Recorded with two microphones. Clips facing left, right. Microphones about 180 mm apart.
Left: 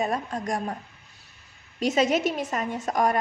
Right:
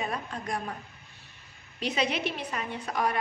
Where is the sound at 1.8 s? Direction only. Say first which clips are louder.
Left 7 dB; 45° left (ahead or behind).